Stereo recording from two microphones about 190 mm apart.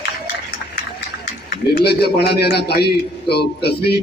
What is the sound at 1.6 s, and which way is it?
A man's voice, 55° left (ahead or behind).